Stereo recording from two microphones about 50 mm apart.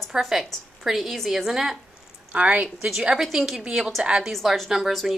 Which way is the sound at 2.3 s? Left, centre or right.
Right.